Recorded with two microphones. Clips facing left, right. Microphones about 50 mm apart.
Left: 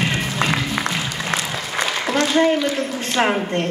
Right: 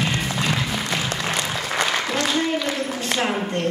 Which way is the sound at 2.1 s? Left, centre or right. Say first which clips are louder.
Left 9 dB; left.